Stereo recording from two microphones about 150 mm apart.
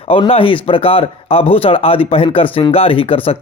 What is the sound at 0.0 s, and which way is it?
Speech, 40° left (ahead or behind).